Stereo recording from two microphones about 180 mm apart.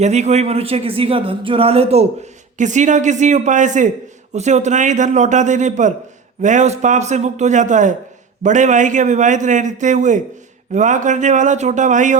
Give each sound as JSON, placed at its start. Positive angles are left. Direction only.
{"t": 0.0, "sound": "a man's voice", "side_deg": -40}